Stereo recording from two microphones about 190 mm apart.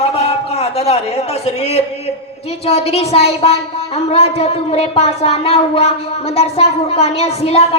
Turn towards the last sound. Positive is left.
turn(degrees=35)  # may be behind; listen again after turning